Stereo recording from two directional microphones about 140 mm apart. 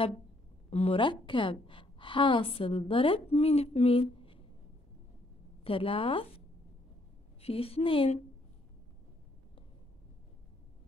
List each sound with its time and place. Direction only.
0.7 s a woman's voice: 45° left (ahead or behind)
5.6 s speech: 40° left (ahead or behind)
7.4 s a woman's voice: 45° left (ahead or behind)